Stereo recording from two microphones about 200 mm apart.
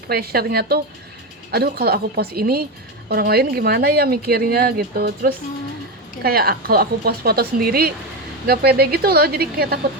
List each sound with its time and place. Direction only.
0.1 s speech: 50° right (ahead or behind)